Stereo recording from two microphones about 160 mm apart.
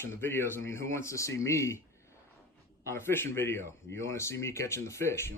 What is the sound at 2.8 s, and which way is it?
Speech, 15° left (ahead or behind).